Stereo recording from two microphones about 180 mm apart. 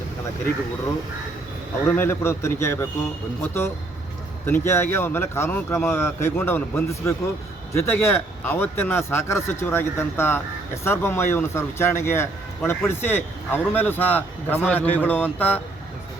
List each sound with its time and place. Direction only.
2.0 s a man's voice: 15° left (ahead or behind)